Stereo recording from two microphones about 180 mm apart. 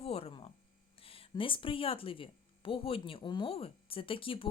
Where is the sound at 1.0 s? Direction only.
30° left (ahead or behind).